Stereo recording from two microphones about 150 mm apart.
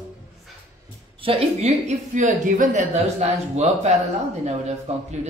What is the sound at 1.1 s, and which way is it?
A woman's voice, 40° right (ahead or behind).